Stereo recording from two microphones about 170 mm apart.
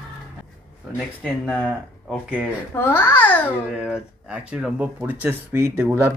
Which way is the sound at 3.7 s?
5° right (ahead or behind).